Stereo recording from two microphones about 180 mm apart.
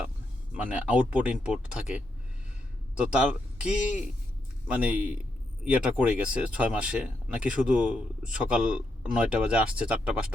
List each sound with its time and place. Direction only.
0.5 s speech: 10° right (ahead or behind)
3.6 s speech: 5° right (ahead or behind)